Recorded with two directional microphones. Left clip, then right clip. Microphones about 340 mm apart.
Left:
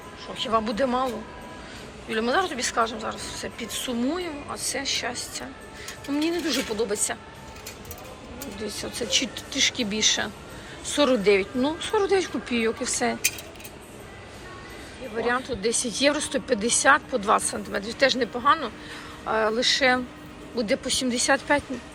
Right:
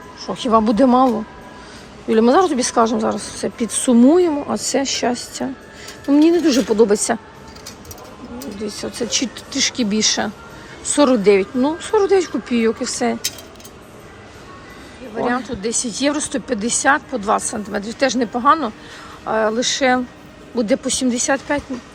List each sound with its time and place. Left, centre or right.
0.2 s speech: centre
8.6 s speech: centre
15.2 s speech: centre